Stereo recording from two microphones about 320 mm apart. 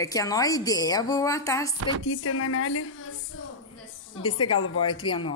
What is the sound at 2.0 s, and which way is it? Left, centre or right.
A woman's voice, left.